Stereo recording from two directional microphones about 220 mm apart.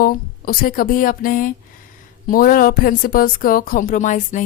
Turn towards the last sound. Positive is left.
turn(degrees=35)  # may be behind; listen again after turning